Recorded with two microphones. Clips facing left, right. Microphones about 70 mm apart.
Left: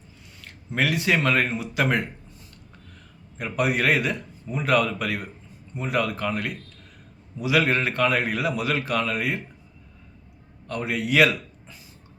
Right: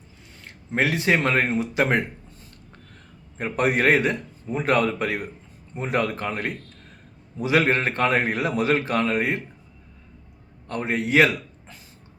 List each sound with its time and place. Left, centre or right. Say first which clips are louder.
0.8 s speech: right 1 dB; right
3.3 s a man's voice: right 2 dB; right
10.7 s a man's voice: right 2 dB; right